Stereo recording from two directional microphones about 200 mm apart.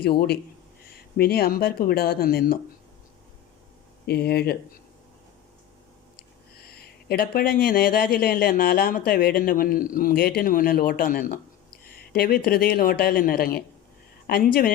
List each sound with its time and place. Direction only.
1.1 s speech: 50° left (ahead or behind)
4.0 s speech: 55° left (ahead or behind)
6.6 s speech: 50° left (ahead or behind)